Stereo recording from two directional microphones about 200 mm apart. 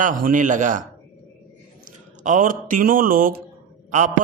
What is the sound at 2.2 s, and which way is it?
Speech, 40° right (ahead or behind).